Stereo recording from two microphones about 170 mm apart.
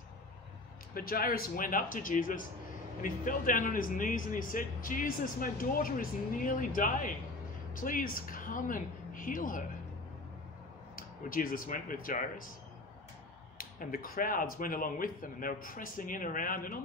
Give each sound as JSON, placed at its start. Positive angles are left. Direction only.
{"t": 0.9, "sound": "a man's voice", "side_deg": 60}
{"t": 11.0, "sound": "speech", "side_deg": 55}
{"t": 13.6, "sound": "speech", "side_deg": 55}